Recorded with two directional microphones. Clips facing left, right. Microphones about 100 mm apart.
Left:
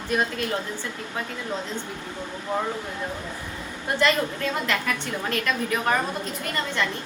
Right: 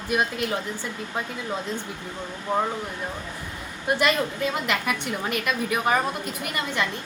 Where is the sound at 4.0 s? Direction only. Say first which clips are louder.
Left 2 dB; 15° right (ahead or behind).